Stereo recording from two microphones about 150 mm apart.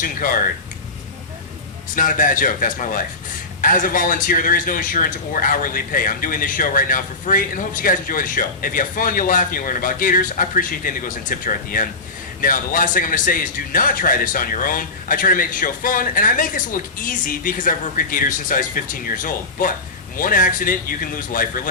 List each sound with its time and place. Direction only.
0.0 s speech: 65° left (ahead or behind)
2.0 s speech: 65° left (ahead or behind)